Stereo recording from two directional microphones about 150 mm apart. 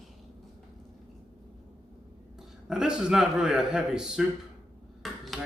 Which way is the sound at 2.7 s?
5° right (ahead or behind).